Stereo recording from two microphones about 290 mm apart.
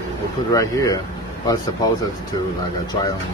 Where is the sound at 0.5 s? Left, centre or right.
Centre.